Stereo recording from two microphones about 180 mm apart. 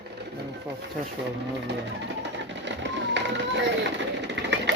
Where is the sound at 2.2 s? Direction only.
85° right.